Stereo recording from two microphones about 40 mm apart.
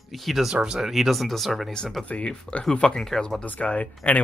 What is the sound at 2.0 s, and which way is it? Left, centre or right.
Speech, left.